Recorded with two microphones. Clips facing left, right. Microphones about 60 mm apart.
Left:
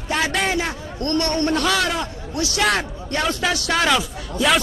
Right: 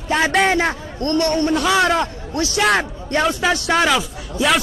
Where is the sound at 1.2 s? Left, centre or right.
Centre.